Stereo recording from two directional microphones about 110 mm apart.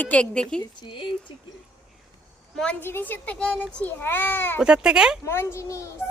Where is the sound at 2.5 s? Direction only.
10° left (ahead or behind).